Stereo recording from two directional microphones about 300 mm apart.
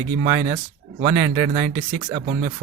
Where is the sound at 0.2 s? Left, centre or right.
Right.